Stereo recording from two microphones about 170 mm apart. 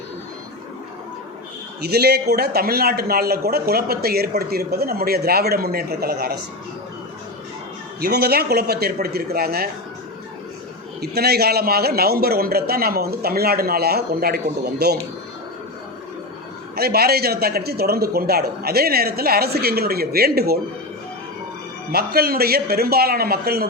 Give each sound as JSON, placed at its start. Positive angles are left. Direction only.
{"t": 1.8, "sound": "a man's voice", "side_deg": -70}
{"t": 8.0, "sound": "a man's voice", "side_deg": -65}
{"t": 11.0, "sound": "a man's voice", "side_deg": -70}
{"t": 16.7, "sound": "a man's voice", "side_deg": -65}
{"t": 21.9, "sound": "a man's voice", "side_deg": -65}